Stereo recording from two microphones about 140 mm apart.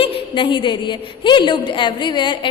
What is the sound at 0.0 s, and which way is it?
A woman's voice, 40° left (ahead or behind).